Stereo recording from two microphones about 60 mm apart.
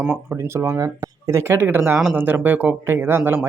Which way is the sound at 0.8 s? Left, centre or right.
Right.